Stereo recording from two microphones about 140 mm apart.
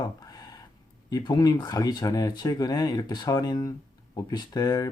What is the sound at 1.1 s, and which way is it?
Speech, 30° left (ahead or behind).